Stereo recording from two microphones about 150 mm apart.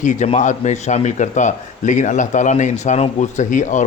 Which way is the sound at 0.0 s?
55° left (ahead or behind).